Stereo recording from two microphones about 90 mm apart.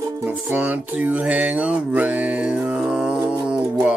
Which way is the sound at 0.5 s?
20° right (ahead or behind).